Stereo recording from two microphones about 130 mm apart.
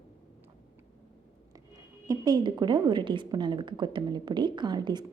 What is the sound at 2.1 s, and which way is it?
A woman's voice, 30° right (ahead or behind).